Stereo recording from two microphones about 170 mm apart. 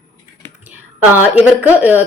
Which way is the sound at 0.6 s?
10° right (ahead or behind).